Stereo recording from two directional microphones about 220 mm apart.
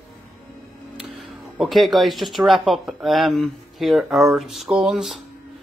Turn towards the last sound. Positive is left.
turn(degrees=0)  # may be behind; listen again after turning